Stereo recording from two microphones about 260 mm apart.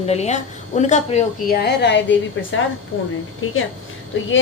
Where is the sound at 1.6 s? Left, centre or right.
Left.